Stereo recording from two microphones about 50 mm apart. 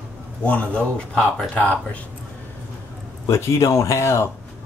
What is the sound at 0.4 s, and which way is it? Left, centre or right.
Speech, left.